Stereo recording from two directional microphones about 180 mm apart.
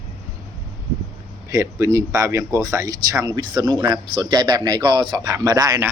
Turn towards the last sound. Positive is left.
turn(degrees=-20)  # may be behind; listen again after turning